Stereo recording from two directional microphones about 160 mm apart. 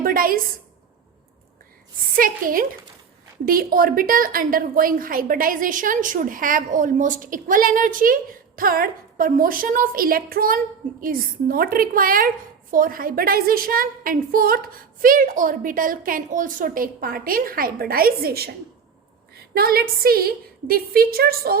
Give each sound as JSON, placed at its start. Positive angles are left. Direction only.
{"t": 0.0, "sound": "a woman's voice", "side_deg": -65}
{"t": 2.1, "sound": "a woman's voice", "side_deg": -60}